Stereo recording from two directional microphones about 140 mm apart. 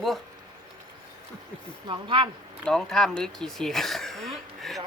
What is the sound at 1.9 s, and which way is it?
Speech, 35° right (ahead or behind).